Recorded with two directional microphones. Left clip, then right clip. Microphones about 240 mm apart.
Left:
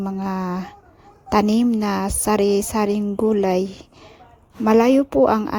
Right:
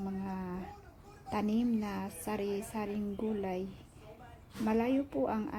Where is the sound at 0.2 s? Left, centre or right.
Left.